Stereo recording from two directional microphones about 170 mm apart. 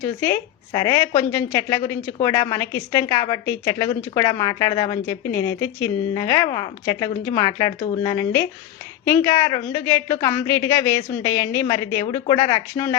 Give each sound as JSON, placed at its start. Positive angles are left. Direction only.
{"t": 0.0, "sound": "a woman's voice", "side_deg": 15}